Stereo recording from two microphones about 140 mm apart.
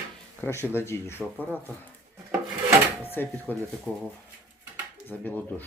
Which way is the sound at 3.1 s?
15° left (ahead or behind).